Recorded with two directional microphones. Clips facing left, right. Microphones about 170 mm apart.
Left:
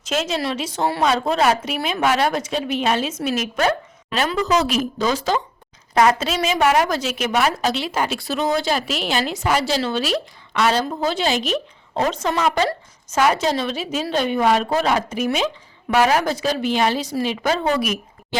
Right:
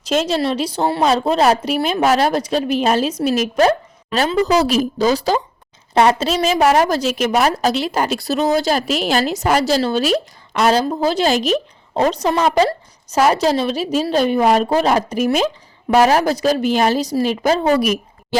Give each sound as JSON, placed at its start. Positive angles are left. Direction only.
{"t": 0.0, "sound": "a woman's voice", "side_deg": -35}